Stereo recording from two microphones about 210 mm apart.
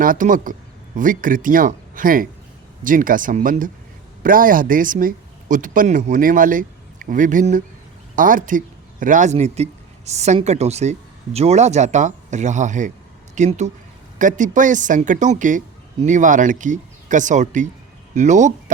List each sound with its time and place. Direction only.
0.0 s speech: 40° right (ahead or behind)